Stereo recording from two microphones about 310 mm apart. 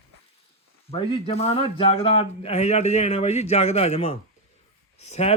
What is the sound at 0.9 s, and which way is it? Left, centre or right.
A man's voice, centre.